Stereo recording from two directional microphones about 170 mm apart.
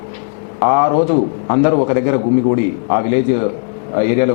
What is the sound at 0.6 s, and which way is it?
A man's voice, 15° left (ahead or behind).